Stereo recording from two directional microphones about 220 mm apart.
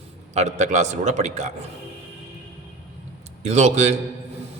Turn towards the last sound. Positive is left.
turn(degrees=-30)  # may be behind; listen again after turning